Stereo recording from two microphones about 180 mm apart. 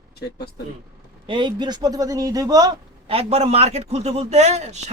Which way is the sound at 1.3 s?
25° right (ahead or behind).